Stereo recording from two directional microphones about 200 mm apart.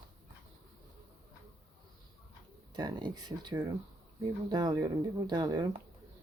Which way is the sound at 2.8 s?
20° right (ahead or behind).